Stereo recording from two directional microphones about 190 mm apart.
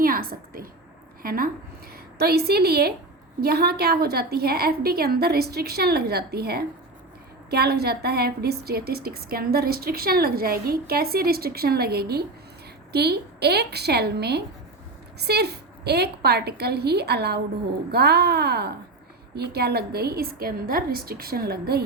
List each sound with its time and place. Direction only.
0.0 s a woman's voice: 50° right (ahead or behind)